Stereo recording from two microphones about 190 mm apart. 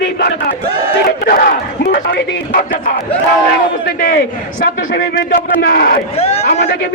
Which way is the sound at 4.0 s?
60° left (ahead or behind).